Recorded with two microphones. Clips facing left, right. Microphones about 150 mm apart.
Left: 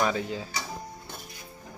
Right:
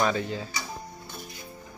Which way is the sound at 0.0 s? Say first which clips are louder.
Right 1 dB; 10° left (ahead or behind).